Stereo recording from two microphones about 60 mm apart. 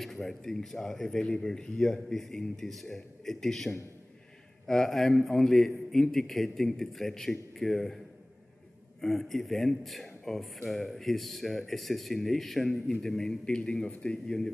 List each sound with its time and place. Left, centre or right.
0.0 s a man's voice: centre
9.0 s a man's voice: centre